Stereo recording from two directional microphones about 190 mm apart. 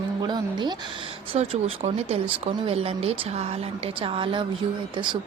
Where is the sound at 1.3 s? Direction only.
35° right (ahead or behind).